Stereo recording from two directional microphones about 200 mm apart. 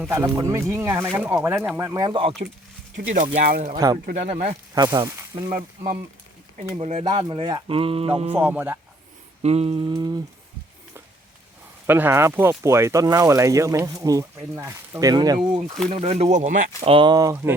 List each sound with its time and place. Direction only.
0.0 s speech: 10° right (ahead or behind)
3.2 s speech: 45° right (ahead or behind)
4.0 s speech: 35° right (ahead or behind)
4.7 s speech: 20° right (ahead or behind)
5.5 s speech: 40° right (ahead or behind)
6.7 s speech: 30° right (ahead or behind)
8.4 s speech: 10° right (ahead or behind)
9.4 s speech: 30° right (ahead or behind)
11.9 s speech: 10° right (ahead or behind)
15.9 s speech: 30° right (ahead or behind)
16.8 s speech: 25° right (ahead or behind)